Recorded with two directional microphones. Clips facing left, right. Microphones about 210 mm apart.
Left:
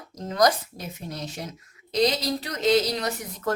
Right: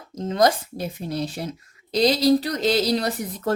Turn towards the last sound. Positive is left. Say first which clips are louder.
# right 4 dB
turn(degrees=-35)  # may be behind; listen again after turning